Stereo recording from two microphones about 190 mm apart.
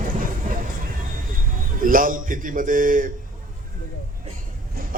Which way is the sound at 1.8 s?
45° right (ahead or behind).